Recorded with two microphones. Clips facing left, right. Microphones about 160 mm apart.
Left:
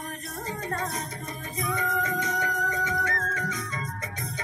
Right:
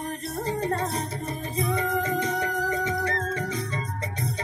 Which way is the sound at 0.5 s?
30° right (ahead or behind).